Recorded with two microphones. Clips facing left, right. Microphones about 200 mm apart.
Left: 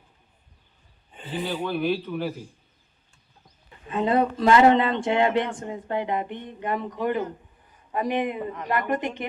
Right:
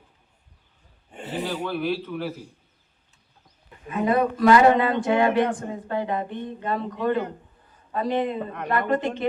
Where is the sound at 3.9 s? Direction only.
25° left (ahead or behind).